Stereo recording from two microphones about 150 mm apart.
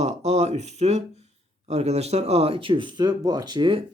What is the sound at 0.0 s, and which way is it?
Speech, 45° right (ahead or behind).